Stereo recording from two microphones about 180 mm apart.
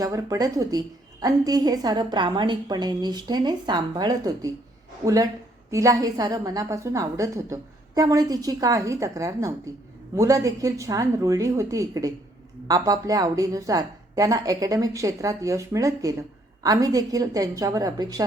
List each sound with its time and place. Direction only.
0.0 s a woman's voice: 20° right (ahead or behind)